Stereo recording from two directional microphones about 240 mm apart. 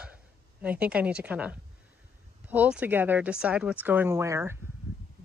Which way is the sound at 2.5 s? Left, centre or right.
Centre.